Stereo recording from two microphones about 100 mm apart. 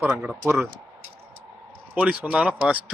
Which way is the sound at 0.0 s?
15° right (ahead or behind).